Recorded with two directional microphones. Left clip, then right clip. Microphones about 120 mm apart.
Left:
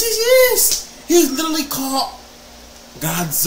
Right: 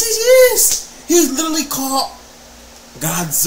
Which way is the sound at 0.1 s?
15° right (ahead or behind).